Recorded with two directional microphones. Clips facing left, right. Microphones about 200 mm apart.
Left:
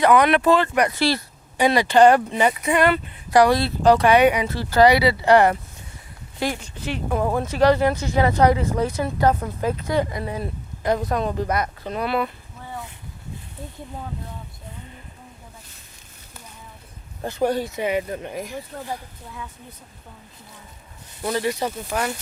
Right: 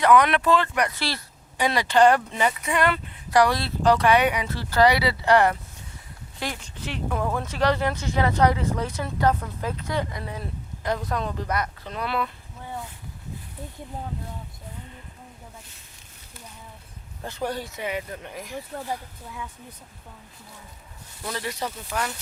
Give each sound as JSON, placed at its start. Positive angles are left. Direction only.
{"t": 0.0, "sound": "speech", "side_deg": 10}
{"t": 7.1, "sound": "speech", "side_deg": 25}
{"t": 7.6, "sound": "speech", "side_deg": 10}
{"t": 11.9, "sound": "speech", "side_deg": 10}
{"t": 17.5, "sound": "speech", "side_deg": 15}
{"t": 21.3, "sound": "speech", "side_deg": 15}